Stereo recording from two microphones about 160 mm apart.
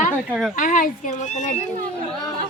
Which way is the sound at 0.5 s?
55° left (ahead or behind).